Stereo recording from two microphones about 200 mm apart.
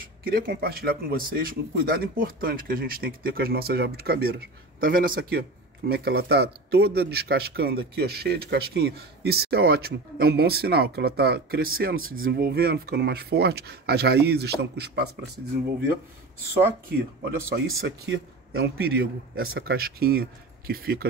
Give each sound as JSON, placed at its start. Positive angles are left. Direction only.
{"t": 0.3, "sound": "speech", "side_deg": -50}
{"t": 17.7, "sound": "speech", "side_deg": -70}